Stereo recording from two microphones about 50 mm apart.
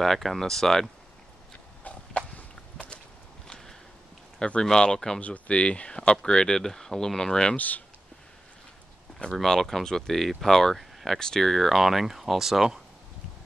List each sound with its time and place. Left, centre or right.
0.0 s speech: centre
1.9 s a sound: left
3.4 s a sound: centre
4.4 s speech: centre
5.2 s speech: left
7.5 s speech: left
9.3 s speech: centre